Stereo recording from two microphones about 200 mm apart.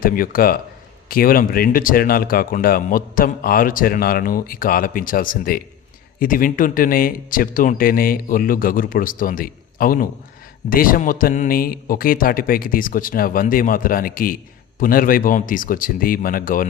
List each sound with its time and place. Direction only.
0.0 s speech: 45° left (ahead or behind)